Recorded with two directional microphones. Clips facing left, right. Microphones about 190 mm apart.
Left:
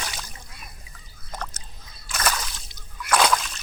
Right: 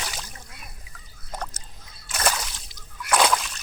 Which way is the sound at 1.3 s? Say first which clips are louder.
Right 1 dB; 15° right (ahead or behind).